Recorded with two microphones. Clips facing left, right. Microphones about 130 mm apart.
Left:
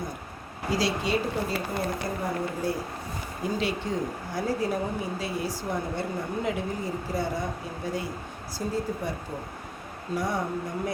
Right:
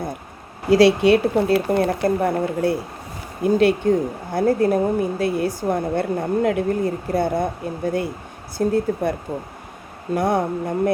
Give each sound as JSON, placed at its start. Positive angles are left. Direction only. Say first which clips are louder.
{"t": 0.7, "sound": "speech", "louder": "right 13 dB", "side_deg": -70}
{"t": 8.5, "sound": "speech", "louder": "right 10 dB", "side_deg": -60}
{"t": 10.2, "sound": "speech", "louder": "right 9 dB", "side_deg": -60}